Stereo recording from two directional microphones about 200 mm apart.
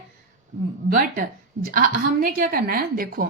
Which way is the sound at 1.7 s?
45° right (ahead or behind).